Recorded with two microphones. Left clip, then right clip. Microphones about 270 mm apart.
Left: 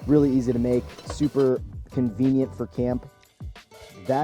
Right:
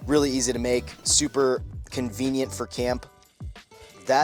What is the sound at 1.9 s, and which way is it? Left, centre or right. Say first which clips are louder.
Speech: left 4 dB; centre.